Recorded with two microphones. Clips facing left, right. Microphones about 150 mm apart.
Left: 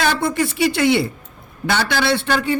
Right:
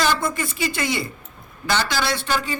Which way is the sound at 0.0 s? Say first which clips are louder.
Left 3 dB; 65° left (ahead or behind).